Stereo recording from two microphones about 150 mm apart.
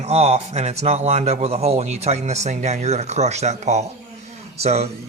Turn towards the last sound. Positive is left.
turn(degrees=-45)  # may be behind; listen again after turning